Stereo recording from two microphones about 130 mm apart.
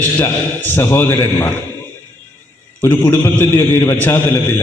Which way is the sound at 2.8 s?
20° left (ahead or behind).